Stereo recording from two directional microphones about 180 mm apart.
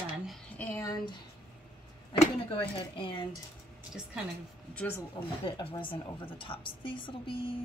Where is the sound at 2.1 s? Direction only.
30° left (ahead or behind).